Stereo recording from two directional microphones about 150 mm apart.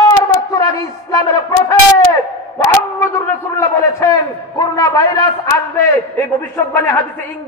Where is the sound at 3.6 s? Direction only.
20° left (ahead or behind).